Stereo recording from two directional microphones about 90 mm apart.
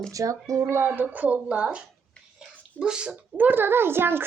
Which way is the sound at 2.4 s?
10° right (ahead or behind).